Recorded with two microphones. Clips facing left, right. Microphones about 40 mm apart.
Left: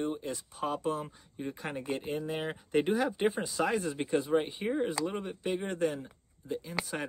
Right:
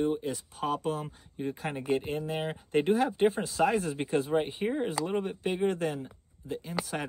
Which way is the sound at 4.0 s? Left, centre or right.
Centre.